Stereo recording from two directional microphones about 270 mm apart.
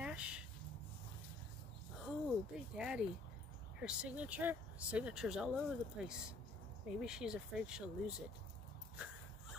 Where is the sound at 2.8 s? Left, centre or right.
Centre.